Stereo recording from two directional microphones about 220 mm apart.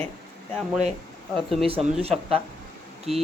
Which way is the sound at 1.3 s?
Centre (ahead or behind).